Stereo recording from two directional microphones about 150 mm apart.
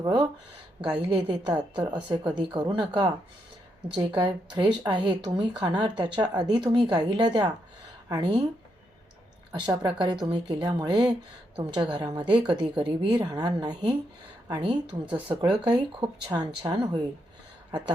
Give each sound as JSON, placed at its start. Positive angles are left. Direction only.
{"t": 0.0, "sound": "speech", "side_deg": -30}
{"t": 9.5, "sound": "speech", "side_deg": -30}